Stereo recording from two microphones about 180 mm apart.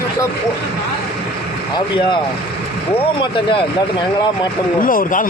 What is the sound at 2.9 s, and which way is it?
Speech, 30° left (ahead or behind).